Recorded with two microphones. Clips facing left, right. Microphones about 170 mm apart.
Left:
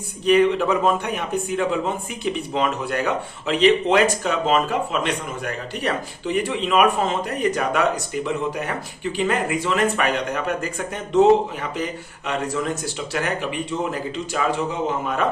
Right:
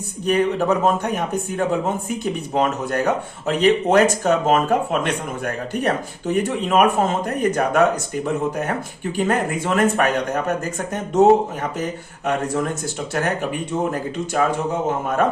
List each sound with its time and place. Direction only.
0.3 s speech: 40° right (ahead or behind)